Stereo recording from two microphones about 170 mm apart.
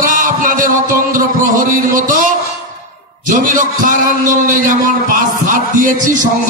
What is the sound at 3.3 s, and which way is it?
A man's voice, 50° right (ahead or behind).